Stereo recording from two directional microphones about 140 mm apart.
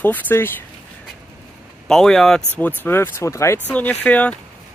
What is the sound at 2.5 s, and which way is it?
Speech, 15° left (ahead or behind).